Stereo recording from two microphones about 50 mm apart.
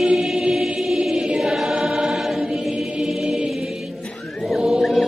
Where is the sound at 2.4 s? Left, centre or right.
Centre.